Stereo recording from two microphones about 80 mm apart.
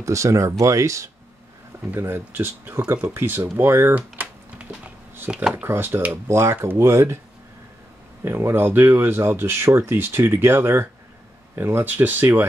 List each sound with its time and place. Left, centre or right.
0.0 s speech: right
1.9 s speech: right
3.9 s typing: centre
5.3 s speech: centre
5.6 s speech: right
8.2 s speech: right